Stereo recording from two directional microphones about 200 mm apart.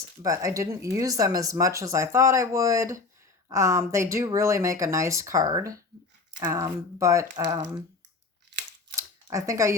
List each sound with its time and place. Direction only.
0.2 s speech: 15° right (ahead or behind)
9.0 s camera: 15° right (ahead or behind)